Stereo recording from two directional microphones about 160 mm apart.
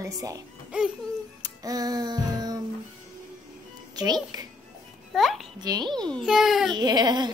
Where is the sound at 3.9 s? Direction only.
25° right (ahead or behind).